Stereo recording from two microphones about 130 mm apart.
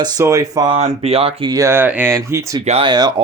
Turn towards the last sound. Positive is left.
turn(degrees=-30)  # may be behind; listen again after turning